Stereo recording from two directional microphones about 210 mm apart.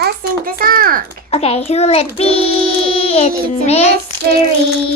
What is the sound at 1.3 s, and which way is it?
Child singing, 30° left (ahead or behind).